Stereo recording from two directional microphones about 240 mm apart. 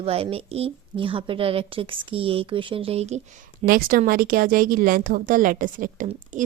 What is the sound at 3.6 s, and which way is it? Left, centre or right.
Speech, right.